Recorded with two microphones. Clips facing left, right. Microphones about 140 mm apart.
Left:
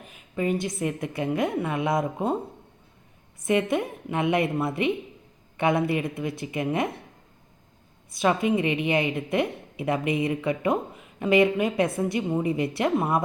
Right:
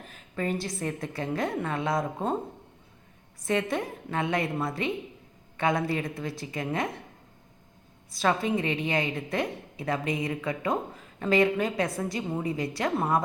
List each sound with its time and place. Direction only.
0.6 s a woman's voice: 20° left (ahead or behind)
3.4 s a woman's voice: 20° left (ahead or behind)
8.2 s a woman's voice: 15° left (ahead or behind)
13.0 s a woman's voice: 15° left (ahead or behind)